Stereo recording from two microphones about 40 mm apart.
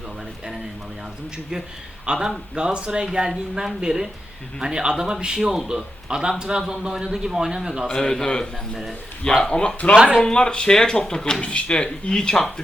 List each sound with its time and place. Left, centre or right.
2.1 s speech: right
3.2 s a man's voice: centre
7.9 s a man's voice: centre